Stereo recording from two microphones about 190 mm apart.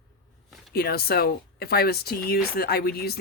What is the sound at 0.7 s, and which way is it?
Speech, 55° left (ahead or behind).